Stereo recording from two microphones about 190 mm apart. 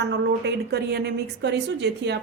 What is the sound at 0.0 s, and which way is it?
A woman's voice, 65° right (ahead or behind).